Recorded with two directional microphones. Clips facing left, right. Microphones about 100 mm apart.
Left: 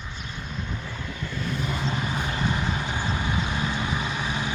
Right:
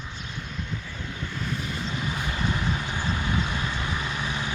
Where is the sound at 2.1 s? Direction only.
25° left (ahead or behind).